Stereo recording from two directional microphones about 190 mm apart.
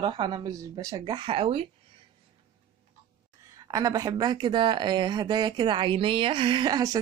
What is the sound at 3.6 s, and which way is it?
Speech, 20° right (ahead or behind).